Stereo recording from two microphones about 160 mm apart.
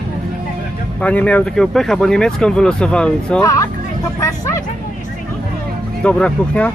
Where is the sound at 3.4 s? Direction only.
20° left (ahead or behind).